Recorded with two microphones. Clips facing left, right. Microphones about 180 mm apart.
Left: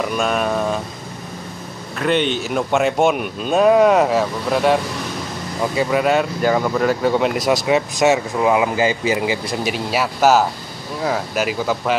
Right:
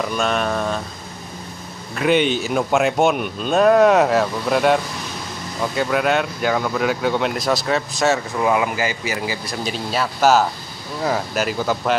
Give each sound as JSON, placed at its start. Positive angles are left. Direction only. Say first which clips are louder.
{"t": 0.1, "sound": "speech", "louder": "left 1 dB", "side_deg": 5}
{"t": 2.0, "sound": "speech", "louder": "right 1 dB", "side_deg": -5}
{"t": 7.4, "sound": "speech", "louder": "left 3 dB", "side_deg": 15}